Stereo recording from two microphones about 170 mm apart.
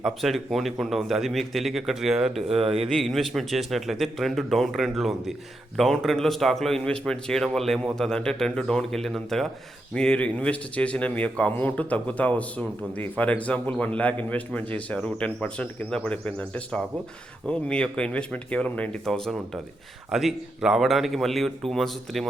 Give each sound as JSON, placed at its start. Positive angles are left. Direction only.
{"t": 0.0, "sound": "a man's voice", "side_deg": 0}
{"t": 2.5, "sound": "speech", "side_deg": -35}
{"t": 2.9, "sound": "a man's voice", "side_deg": 0}